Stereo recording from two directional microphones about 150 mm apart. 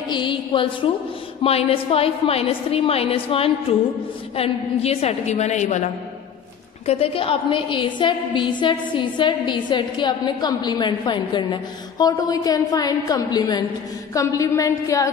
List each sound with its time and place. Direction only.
0.1 s music: 35° left (ahead or behind)
1.4 s a woman's voice: 40° left (ahead or behind)
6.9 s a woman's voice: 40° left (ahead or behind)
14.1 s a sound: 20° left (ahead or behind)